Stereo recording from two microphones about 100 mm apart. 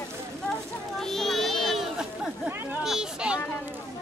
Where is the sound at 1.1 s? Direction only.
Centre (ahead or behind).